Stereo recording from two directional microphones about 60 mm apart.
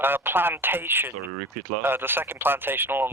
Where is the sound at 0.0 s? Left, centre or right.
Right.